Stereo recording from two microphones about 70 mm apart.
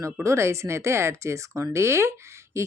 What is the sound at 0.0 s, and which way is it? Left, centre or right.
Speech, right.